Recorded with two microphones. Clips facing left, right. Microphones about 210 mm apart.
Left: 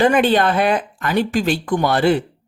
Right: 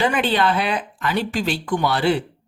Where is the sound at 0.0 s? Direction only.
50° left (ahead or behind).